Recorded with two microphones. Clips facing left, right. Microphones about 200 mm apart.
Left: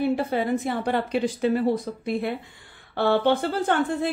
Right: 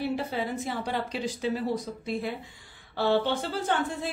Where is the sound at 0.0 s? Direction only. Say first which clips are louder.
Left 6 dB; 55° left (ahead or behind).